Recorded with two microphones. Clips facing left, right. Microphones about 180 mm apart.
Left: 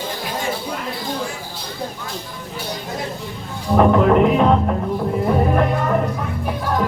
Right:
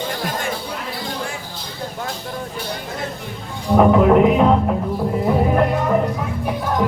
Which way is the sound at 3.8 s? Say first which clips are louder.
Right 1 dB; 5° right (ahead or behind).